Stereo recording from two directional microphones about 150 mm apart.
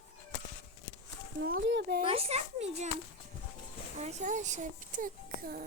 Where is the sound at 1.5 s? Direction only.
90° right.